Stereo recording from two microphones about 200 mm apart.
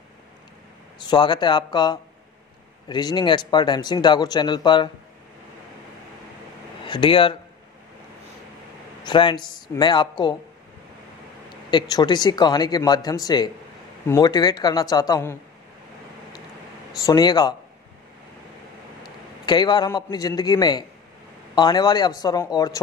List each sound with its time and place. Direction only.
1.0 s speech: 25° left (ahead or behind)
6.8 s speech: 25° left (ahead or behind)
9.0 s speech: 25° left (ahead or behind)
11.7 s speech: 20° left (ahead or behind)
17.0 s speech: 20° left (ahead or behind)
19.4 s speech: 20° left (ahead or behind)